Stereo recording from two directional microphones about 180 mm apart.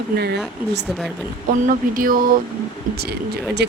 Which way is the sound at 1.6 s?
50° right (ahead or behind).